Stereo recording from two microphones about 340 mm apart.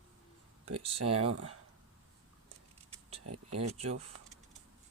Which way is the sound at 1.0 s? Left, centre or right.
Right.